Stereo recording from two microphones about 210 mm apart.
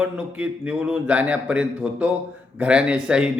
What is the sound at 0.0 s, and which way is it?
A man's voice, 5° right (ahead or behind).